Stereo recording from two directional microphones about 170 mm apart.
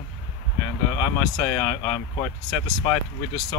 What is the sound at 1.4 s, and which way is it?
Speech, 5° left (ahead or behind).